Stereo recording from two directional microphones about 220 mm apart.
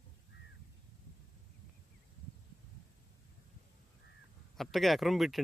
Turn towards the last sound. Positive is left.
turn(degrees=0)  # may be behind; listen again after turning